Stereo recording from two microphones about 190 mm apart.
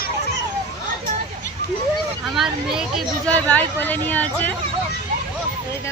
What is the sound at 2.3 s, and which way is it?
Speech, centre (ahead or behind).